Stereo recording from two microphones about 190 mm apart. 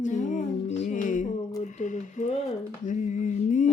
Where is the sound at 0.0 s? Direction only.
40° left (ahead or behind).